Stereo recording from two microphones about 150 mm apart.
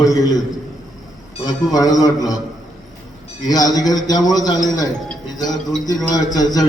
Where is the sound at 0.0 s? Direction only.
25° left (ahead or behind).